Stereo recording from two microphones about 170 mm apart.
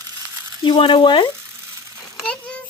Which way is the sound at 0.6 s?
30° left (ahead or behind).